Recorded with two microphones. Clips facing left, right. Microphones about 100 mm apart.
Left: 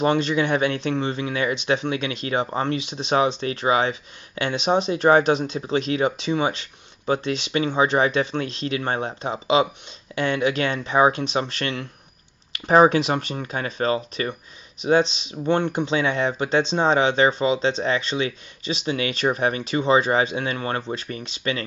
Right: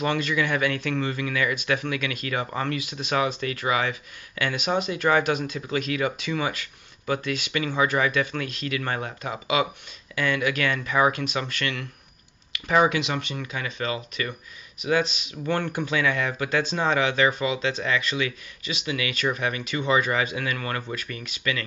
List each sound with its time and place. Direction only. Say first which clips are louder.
0.0 s speech: left 5 dB; 30° left (ahead or behind)